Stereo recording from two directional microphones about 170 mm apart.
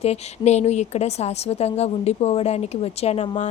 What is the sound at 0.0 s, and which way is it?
A woman's voice, 40° left (ahead or behind).